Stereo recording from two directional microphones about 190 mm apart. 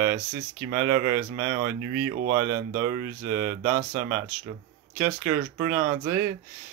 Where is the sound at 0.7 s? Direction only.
15° right (ahead or behind).